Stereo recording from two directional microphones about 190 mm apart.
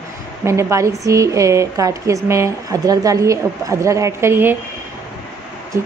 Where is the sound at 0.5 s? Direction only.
15° right (ahead or behind).